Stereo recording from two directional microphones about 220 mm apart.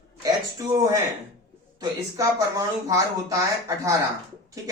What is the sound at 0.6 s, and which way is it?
Speech, 15° right (ahead or behind).